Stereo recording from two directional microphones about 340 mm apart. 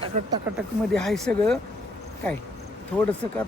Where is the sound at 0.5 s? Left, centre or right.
Centre.